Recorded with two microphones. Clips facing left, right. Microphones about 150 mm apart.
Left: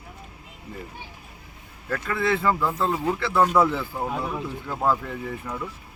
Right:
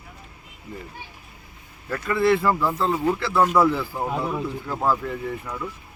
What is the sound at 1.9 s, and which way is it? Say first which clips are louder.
Speech: right 4 dB; 5° right (ahead or behind).